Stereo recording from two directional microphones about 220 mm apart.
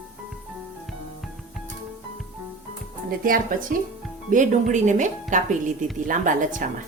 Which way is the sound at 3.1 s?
40° right (ahead or behind).